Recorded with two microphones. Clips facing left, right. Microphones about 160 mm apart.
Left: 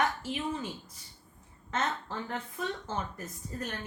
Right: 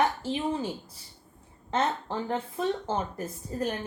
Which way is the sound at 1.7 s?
30° right (ahead or behind).